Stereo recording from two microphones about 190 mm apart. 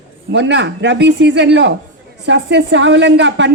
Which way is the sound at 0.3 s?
70° right (ahead or behind).